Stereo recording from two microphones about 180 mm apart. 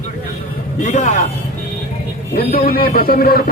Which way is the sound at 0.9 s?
40° left (ahead or behind).